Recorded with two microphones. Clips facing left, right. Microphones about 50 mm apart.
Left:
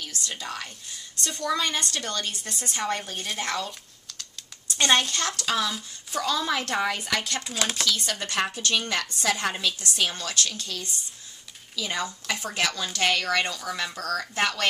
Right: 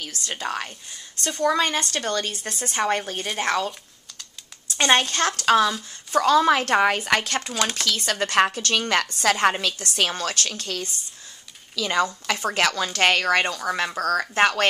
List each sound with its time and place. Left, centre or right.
0.2 s a woman's voice: right
4.7 s a woman's voice: right
11.7 s a woman's voice: right